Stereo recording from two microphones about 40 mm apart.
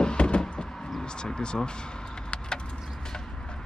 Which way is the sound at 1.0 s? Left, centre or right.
Centre.